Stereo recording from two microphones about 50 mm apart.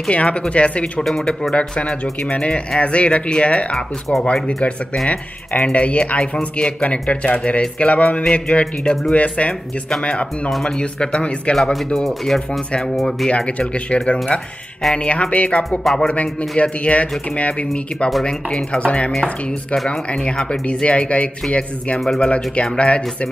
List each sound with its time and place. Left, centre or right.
0.1 s speech: left
11.7 s speech: centre
13.9 s speech: centre
15.8 s speech: centre
16.1 s speech: left
22.0 s speech: centre
22.3 s speech: left